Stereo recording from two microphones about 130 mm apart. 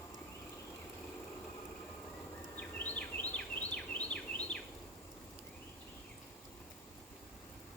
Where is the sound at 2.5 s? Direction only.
10° left (ahead or behind).